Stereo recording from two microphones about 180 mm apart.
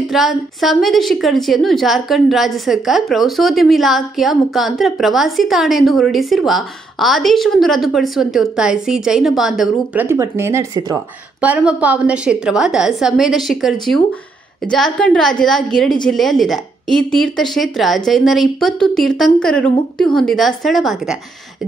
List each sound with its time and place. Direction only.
0.1 s a woman's voice: centre (ahead or behind)
10.0 s speech: 15° right (ahead or behind)
11.4 s a woman's voice: 10° right (ahead or behind)